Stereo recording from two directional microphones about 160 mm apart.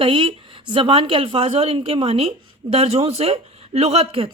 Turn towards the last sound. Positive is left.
turn(degrees=-40)  # may be behind; listen again after turning